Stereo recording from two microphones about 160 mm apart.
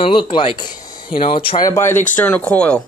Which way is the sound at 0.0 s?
35° left (ahead or behind).